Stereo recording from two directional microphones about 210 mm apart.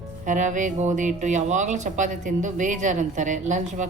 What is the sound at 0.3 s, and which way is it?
Speech, 35° right (ahead or behind).